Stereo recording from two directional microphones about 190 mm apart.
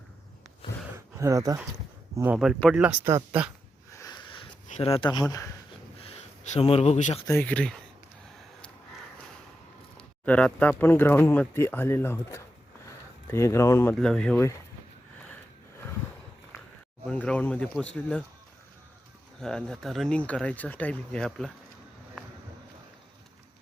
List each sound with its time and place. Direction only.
0.9 s a sound: 15° right (ahead or behind)
2.1 s speech: 10° right (ahead or behind)
2.8 s speech: 15° right (ahead or behind)
3.9 s sniff: 20° left (ahead or behind)
4.7 s speech: 30° left (ahead or behind)
6.0 s speech: 35° left (ahead or behind)
7.3 s speech: 10° left (ahead or behind)
10.2 s speech: 5° left (ahead or behind)
17.1 s speech: 5° left (ahead or behind)
19.4 s speech: 5° left (ahead or behind)